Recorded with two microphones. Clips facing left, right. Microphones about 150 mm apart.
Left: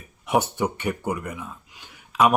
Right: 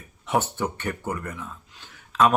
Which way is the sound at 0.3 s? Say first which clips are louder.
Left 2 dB; 10° left (ahead or behind).